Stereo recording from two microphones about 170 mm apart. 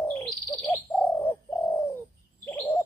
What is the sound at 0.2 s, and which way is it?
Bird, centre (ahead or behind).